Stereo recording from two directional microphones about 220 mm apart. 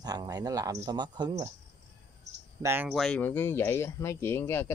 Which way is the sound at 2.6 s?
10° right (ahead or behind).